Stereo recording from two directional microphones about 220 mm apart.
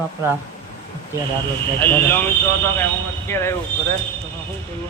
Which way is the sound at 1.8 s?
10° left (ahead or behind).